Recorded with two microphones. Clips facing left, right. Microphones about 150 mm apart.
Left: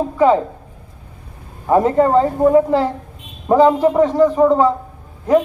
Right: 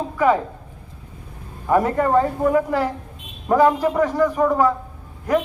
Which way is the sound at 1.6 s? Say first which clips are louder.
Left 5 dB; 25° left (ahead or behind).